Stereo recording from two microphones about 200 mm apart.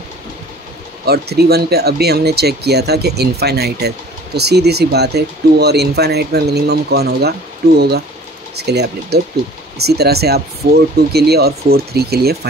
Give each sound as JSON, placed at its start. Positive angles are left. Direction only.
{"t": 1.0, "sound": "speech", "side_deg": -50}